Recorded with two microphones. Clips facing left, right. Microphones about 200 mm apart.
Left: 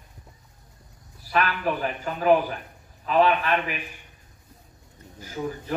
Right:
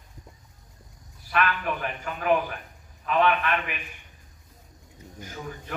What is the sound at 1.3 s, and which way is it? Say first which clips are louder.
Speech: left 2 dB; 35° left (ahead or behind).